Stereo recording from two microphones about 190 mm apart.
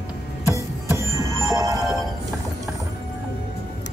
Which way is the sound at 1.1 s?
15° right (ahead or behind).